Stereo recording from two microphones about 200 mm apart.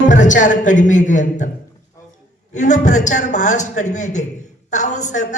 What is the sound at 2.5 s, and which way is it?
A woman's voice, 35° left (ahead or behind).